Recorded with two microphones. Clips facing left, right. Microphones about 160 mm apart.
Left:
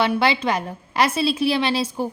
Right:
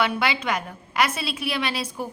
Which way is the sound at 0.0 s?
30° left (ahead or behind).